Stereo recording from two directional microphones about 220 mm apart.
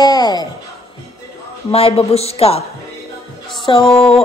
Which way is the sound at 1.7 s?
25° left (ahead or behind).